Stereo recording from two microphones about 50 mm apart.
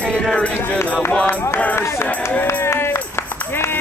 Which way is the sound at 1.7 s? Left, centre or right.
Left.